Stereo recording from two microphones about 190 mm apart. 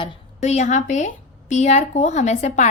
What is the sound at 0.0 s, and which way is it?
A woman's voice, 35° left (ahead or behind).